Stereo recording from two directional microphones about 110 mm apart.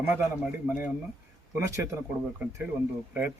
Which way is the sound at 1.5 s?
30° right (ahead or behind).